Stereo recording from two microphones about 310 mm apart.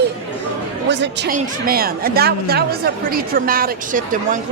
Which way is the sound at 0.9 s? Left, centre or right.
Right.